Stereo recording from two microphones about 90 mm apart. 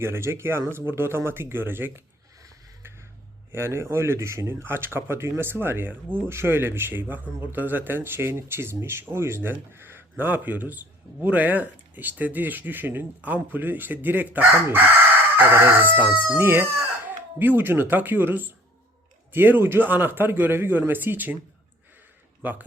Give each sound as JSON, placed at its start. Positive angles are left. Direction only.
{"t": 0.0, "sound": "speech", "side_deg": -30}
{"t": 2.8, "sound": "music", "side_deg": -25}
{"t": 3.5, "sound": "speech", "side_deg": -30}
{"t": 22.4, "sound": "speech", "side_deg": -20}